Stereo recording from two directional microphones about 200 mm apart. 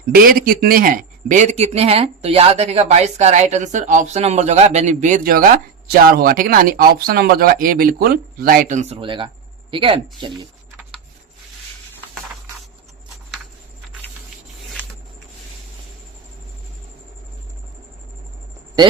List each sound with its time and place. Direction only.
0.1 s a man's voice: 45° right (ahead or behind); by 10.3 s 25° right (ahead or behind)